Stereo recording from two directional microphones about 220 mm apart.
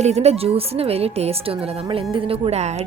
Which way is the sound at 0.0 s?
30° right (ahead or behind).